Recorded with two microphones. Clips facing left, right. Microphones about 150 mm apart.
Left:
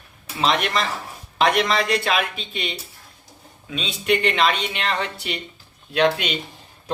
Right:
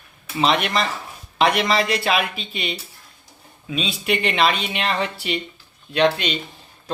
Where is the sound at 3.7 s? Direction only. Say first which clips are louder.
Left 1 dB; 5° right (ahead or behind).